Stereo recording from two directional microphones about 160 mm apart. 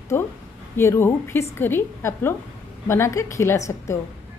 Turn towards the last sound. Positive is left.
turn(degrees=20)  # may be behind; listen again after turning